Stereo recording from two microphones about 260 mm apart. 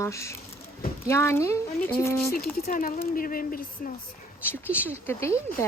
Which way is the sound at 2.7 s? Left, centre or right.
Left.